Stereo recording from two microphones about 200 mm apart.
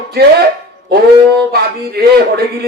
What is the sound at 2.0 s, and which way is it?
Speech, 50° right (ahead or behind).